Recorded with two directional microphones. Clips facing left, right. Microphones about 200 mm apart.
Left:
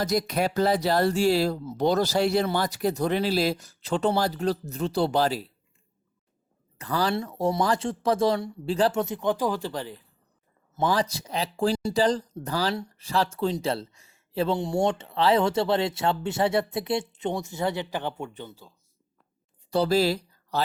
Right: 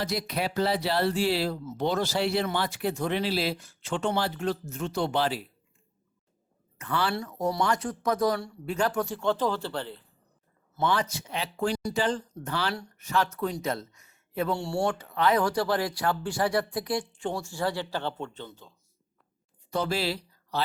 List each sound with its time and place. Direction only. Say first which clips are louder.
0.0 s speech: left 5 dB; 45° left (ahead or behind)
6.7 s speech: left 3 dB; 35° left (ahead or behind); by 10.0 s 15° left (ahead or behind)
10.8 s speech: left 3 dB; 35° left (ahead or behind); by 18.7 s 10° left (ahead or behind)
19.7 s speech: left 6 dB; 35° left (ahead or behind)